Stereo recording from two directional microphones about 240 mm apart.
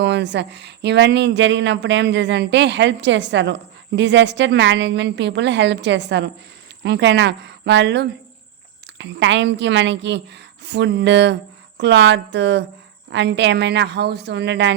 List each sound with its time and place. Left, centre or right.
0.0 s speech: right